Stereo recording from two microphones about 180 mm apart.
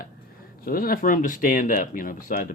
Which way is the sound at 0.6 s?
50° left (ahead or behind).